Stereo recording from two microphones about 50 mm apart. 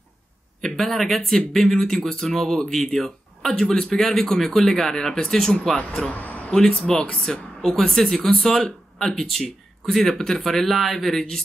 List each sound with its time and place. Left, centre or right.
0.6 s speech: centre
6.0 s speech: left
6.5 s speech: centre